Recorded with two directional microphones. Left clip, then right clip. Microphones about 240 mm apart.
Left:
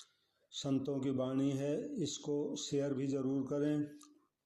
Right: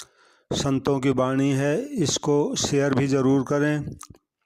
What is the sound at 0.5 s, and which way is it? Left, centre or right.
Speech, right.